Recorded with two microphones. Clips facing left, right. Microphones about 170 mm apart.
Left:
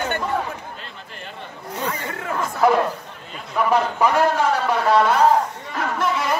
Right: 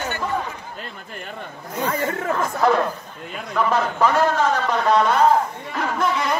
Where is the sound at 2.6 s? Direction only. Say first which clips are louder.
Left 2 dB; 10° left (ahead or behind).